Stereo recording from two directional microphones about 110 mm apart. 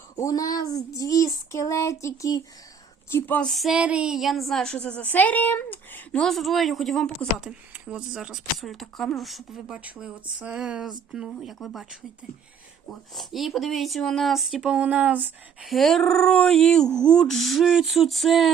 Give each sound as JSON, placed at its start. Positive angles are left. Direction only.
{"t": 0.2, "sound": "a sound", "side_deg": 35}
{"t": 3.1, "sound": "speech", "side_deg": 20}
{"t": 3.5, "sound": "a woman's voice", "side_deg": 0}
{"t": 15.6, "sound": "a woman's voice", "side_deg": 0}